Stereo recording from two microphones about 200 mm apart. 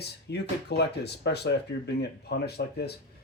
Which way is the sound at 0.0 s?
55° left (ahead or behind).